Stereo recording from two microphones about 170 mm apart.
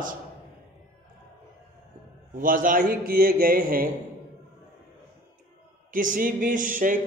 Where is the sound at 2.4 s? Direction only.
55° right (ahead or behind).